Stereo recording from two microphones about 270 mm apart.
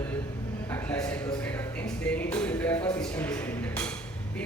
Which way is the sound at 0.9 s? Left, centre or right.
Centre.